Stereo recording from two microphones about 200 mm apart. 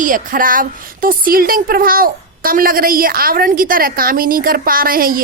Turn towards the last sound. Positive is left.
turn(degrees=-45)  # may be behind; listen again after turning